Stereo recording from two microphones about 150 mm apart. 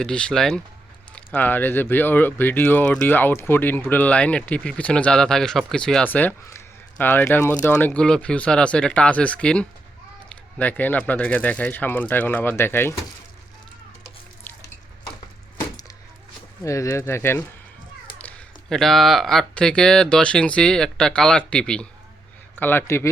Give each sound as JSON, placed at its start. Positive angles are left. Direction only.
{"t": 0.0, "sound": "speech", "side_deg": 5}
{"t": 16.6, "sound": "speech", "side_deg": 20}